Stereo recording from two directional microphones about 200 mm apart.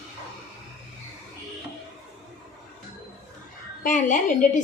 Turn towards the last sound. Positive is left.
turn(degrees=40)  # may be behind; listen again after turning